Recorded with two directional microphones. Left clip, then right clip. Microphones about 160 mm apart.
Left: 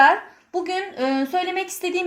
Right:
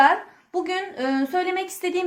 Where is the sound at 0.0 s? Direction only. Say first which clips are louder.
Left 2 dB; 40° left (ahead or behind).